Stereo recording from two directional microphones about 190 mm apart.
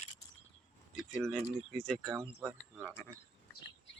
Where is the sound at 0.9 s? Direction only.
Centre (ahead or behind).